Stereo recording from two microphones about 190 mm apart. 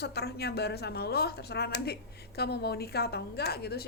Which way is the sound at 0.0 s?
60° left (ahead or behind).